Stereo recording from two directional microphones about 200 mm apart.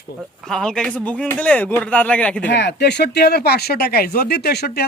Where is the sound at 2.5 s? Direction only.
60° left (ahead or behind).